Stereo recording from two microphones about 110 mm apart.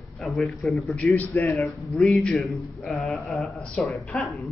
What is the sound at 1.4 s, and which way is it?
Speech, 25° left (ahead or behind).